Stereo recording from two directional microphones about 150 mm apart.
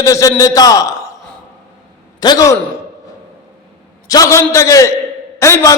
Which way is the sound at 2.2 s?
25° left (ahead or behind).